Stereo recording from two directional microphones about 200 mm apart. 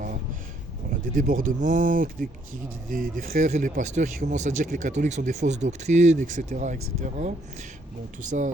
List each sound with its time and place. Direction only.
0.9 s speech: 40° right (ahead or behind)